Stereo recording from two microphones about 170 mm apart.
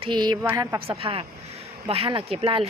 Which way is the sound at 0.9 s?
35° right (ahead or behind).